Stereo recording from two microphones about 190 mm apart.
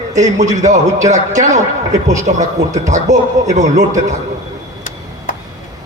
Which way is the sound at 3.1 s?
40° right (ahead or behind).